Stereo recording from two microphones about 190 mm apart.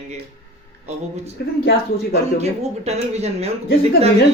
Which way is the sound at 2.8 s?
35° right (ahead or behind).